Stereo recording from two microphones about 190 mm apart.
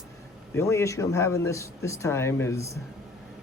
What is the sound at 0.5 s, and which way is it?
Speech, 15° left (ahead or behind).